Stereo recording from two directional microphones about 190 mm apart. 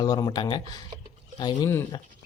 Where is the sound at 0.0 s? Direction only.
20° left (ahead or behind).